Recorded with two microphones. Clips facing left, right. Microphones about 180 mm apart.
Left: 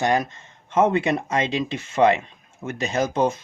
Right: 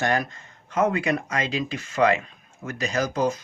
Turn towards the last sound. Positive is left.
turn(degrees=25)  # may be behind; listen again after turning